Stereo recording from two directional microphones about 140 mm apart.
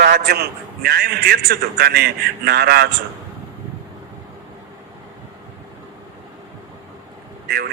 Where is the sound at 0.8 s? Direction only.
90° right.